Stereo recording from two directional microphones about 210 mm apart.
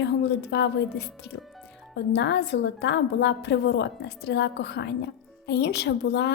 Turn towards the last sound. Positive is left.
turn(degrees=55)  # may be behind; listen again after turning